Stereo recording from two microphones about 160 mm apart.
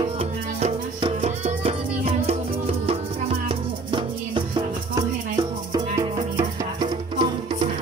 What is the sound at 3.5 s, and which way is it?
Music, 30° right (ahead or behind).